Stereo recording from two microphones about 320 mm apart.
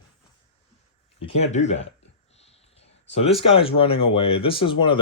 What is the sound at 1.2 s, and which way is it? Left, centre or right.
Speech, centre.